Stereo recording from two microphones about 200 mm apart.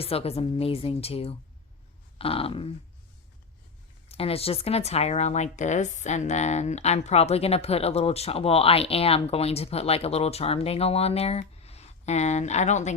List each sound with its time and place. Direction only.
0.0 s a woman's voice: 30° left (ahead or behind)
4.1 s speech: 30° left (ahead or behind)